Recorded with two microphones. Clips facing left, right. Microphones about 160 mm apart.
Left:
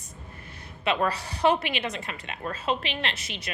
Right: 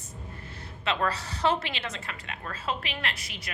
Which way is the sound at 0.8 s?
15° left (ahead or behind).